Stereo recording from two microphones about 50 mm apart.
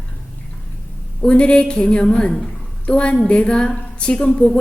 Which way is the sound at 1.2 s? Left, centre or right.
Left.